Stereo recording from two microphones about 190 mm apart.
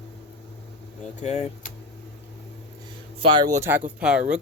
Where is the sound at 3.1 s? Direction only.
25° right (ahead or behind).